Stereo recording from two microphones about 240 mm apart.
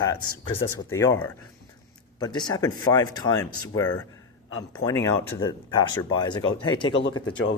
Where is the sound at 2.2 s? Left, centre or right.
Centre.